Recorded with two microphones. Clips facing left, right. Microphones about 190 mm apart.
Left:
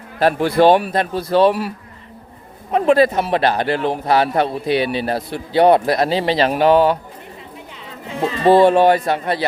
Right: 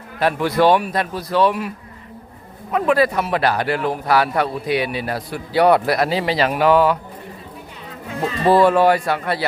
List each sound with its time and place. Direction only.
0.2 s a man's voice: 35° left (ahead or behind)
2.7 s a man's voice: 25° left (ahead or behind)
8.0 s a man's voice: 25° left (ahead or behind)